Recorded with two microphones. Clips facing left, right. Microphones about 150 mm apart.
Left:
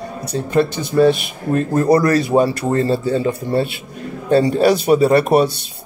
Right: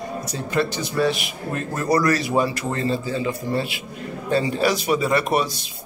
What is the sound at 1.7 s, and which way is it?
Speech, 30° left (ahead or behind).